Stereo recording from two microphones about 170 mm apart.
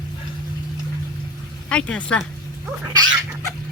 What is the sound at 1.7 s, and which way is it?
Speech, 5° left (ahead or behind).